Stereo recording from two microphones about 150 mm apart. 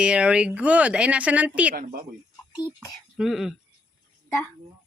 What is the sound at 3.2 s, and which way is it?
Speech, centre (ahead or behind).